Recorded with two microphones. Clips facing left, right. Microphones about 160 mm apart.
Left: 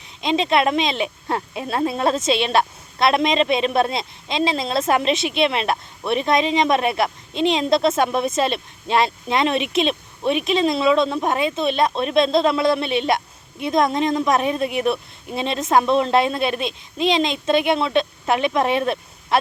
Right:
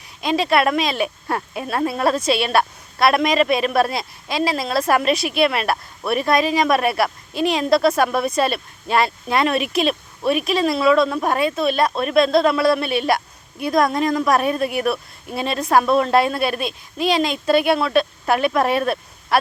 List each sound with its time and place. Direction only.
0.2 s speech: 20° left (ahead or behind)